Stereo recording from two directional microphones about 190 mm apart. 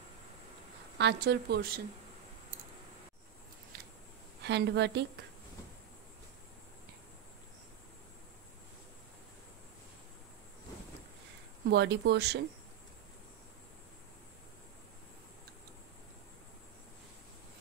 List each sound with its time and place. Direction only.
0.9 s speech: 65° right (ahead or behind)
4.4 s speech: 65° right (ahead or behind)
11.6 s speech: 60° right (ahead or behind)